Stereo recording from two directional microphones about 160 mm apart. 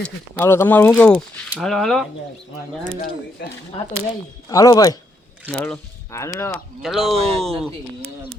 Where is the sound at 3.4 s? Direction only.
90° left.